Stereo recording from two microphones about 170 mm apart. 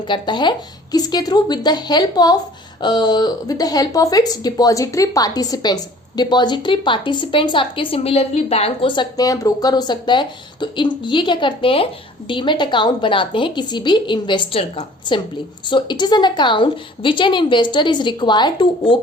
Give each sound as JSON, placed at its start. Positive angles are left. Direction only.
{"t": 0.0, "sound": "speech", "side_deg": 25}